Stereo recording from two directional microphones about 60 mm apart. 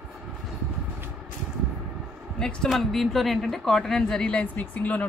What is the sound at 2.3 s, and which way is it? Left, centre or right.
A woman's voice, centre.